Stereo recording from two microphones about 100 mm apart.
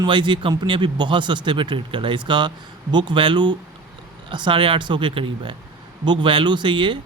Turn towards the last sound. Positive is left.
turn(degrees=-55)  # may be behind; listen again after turning